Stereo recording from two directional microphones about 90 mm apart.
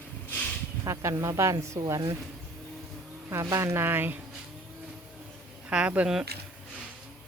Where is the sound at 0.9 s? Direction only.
35° right (ahead or behind).